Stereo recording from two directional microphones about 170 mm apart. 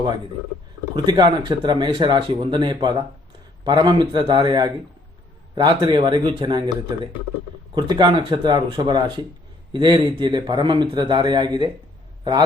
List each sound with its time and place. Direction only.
0.9 s a man's voice: 25° right (ahead or behind)